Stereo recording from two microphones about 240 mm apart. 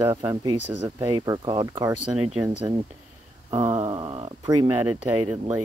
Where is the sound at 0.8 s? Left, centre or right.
Centre.